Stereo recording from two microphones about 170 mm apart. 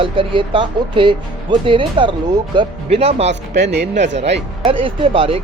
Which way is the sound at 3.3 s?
90° right.